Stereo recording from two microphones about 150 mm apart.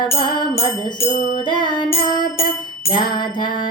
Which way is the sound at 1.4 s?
30° left (ahead or behind).